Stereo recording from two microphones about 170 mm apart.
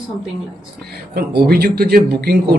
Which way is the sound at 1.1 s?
65° right (ahead or behind).